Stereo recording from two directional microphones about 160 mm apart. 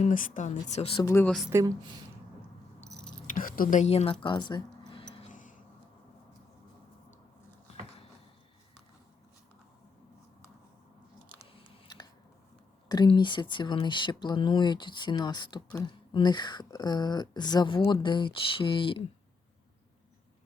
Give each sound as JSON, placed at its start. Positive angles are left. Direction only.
{"t": 0.0, "sound": "speech", "side_deg": 55}
{"t": 1.0, "sound": "speech", "side_deg": 15}
{"t": 1.5, "sound": "speech", "side_deg": -25}
{"t": 3.2, "sound": "speech", "side_deg": 55}
{"t": 4.9, "sound": "a sound", "side_deg": 30}
{"t": 5.3, "sound": "a sound", "side_deg": 55}
{"t": 12.9, "sound": "speech", "side_deg": 25}